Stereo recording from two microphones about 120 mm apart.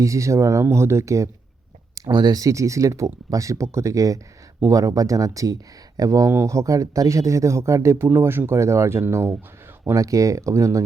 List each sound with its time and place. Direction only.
0.0 s speech: 25° right (ahead or behind)